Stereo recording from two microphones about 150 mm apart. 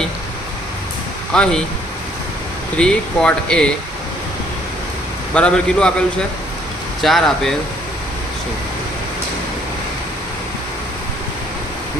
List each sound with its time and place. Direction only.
1.3 s speech: 5° left (ahead or behind)
2.7 s speech: 5° left (ahead or behind)
5.3 s speech: 5° left (ahead or behind)
7.0 s speech: centre (ahead or behind)